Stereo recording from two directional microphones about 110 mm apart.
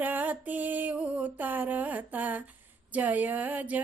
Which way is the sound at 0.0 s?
15° right (ahead or behind).